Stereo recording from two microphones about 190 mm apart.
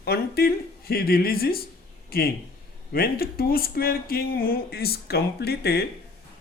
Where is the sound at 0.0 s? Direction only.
55° left (ahead or behind).